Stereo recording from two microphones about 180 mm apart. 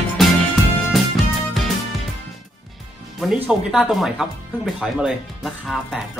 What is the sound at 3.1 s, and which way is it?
Speech, 5° right (ahead or behind).